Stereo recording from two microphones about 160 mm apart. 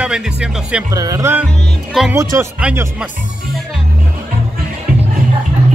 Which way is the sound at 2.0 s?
Centre (ahead or behind).